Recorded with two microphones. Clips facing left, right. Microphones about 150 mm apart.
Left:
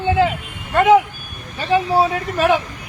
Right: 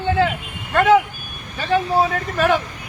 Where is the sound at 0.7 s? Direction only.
15° left (ahead or behind).